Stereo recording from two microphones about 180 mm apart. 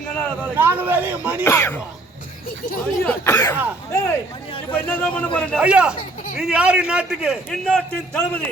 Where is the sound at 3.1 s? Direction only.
15° left (ahead or behind).